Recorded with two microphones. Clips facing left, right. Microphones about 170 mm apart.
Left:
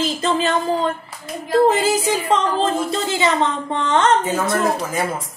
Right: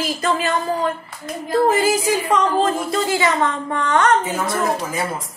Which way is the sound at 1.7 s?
20° left (ahead or behind).